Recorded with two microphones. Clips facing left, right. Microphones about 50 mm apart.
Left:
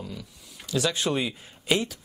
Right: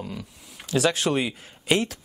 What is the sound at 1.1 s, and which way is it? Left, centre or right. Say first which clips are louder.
Speech: right 3 dB; right.